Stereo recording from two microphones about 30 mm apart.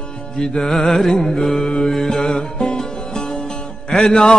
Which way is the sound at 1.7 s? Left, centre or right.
Left.